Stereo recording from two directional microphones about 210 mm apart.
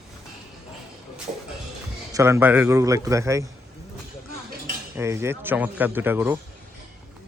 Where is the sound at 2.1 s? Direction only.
15° right (ahead or behind).